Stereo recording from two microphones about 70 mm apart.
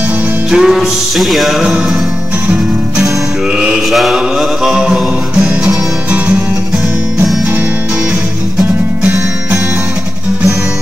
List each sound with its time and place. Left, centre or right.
0.5 s music: centre
3.5 s mantra: centre
3.9 s music: centre
5.4 s music: right